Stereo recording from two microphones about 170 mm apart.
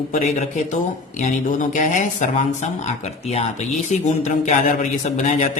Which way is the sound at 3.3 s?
40° left (ahead or behind).